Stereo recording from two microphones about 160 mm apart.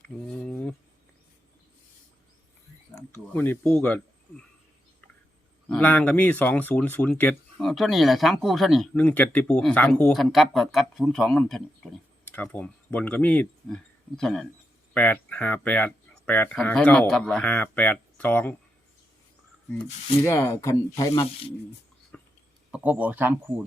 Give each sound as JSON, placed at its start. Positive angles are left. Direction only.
{"t": 0.3, "sound": "a sound", "side_deg": 5}
{"t": 2.9, "sound": "speech", "side_deg": 15}
{"t": 5.6, "sound": "speech", "side_deg": 10}
{"t": 20.2, "sound": "speech", "side_deg": 15}
{"t": 22.1, "sound": "a sound", "side_deg": 10}
{"t": 22.7, "sound": "speech", "side_deg": -10}